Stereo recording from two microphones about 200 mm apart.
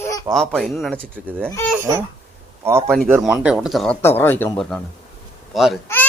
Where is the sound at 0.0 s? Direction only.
15° left (ahead or behind).